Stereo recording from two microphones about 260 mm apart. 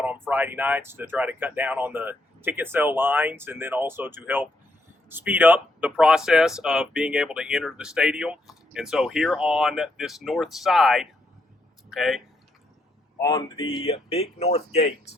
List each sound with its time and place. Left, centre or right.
0.0 s speech: centre
13.1 s speech: centre